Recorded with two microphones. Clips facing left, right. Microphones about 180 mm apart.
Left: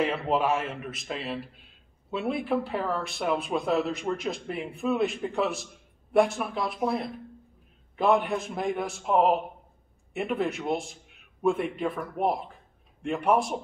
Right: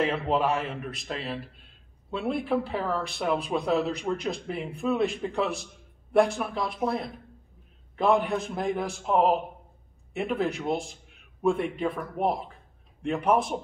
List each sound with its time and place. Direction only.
0.0 s speech: centre (ahead or behind)